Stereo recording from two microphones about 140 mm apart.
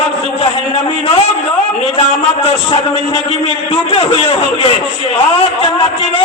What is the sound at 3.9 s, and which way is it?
A man's voice, 40° left (ahead or behind).